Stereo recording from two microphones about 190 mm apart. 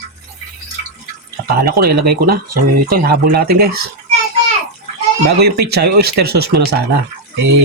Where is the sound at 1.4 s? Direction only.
55° right (ahead or behind).